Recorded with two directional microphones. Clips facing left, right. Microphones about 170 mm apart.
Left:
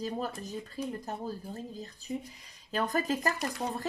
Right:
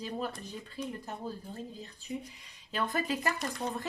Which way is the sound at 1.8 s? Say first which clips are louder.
Left 2 dB; 40° left (ahead or behind).